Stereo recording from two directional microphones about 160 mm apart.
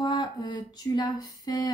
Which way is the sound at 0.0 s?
25° left (ahead or behind).